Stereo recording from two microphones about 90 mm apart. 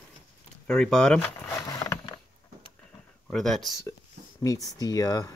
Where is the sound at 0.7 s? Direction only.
10° left (ahead or behind).